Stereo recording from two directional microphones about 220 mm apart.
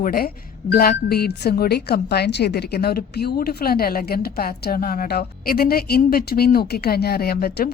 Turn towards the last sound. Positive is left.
turn(degrees=45)  # may be behind; listen again after turning